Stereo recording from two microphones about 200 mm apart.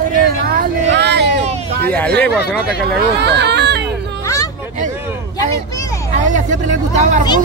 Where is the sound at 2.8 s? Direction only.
55° right (ahead or behind).